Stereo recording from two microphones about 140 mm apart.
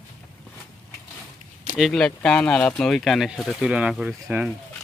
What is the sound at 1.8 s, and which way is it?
Speech, centre (ahead or behind).